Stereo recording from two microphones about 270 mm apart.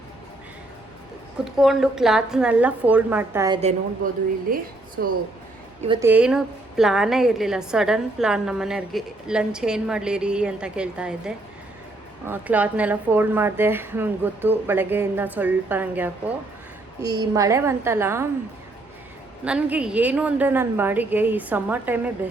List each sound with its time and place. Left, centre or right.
1.5 s a woman's voice: centre
3.6 s a woman's voice: right
5.8 s a woman's voice: centre
19.5 s a woman's voice: centre